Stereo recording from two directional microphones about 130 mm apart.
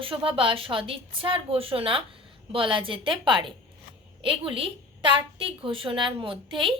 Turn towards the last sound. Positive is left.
turn(degrees=-40)  # may be behind; listen again after turning